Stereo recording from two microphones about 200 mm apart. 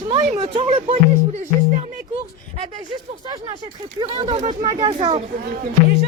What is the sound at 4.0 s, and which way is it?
Speech, 25° right (ahead or behind).